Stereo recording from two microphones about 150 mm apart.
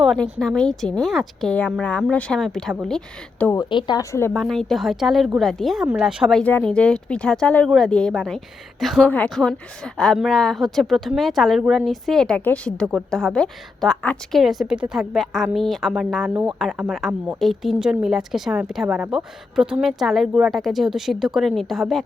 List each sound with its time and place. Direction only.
0.2 s a woman's voice: 5° left (ahead or behind)
3.6 s speech: 30° left (ahead or behind)
4.4 s a woman's voice: centre (ahead or behind)
6.4 s a woman's voice: 10° left (ahead or behind)
16.3 s a woman's voice: 10° right (ahead or behind)